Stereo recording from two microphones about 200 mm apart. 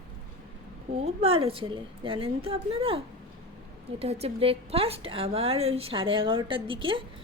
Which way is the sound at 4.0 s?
30° right (ahead or behind).